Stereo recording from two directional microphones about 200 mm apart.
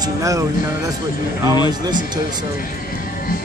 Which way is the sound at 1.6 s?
20° right (ahead or behind).